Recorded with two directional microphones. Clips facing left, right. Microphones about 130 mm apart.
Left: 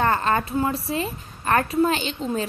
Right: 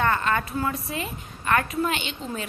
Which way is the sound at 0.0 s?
35° left (ahead or behind).